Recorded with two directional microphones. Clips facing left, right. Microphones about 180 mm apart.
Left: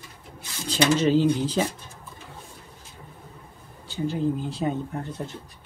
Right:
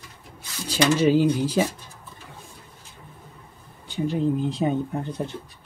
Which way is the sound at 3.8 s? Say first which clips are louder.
Right 2 dB; 15° right (ahead or behind).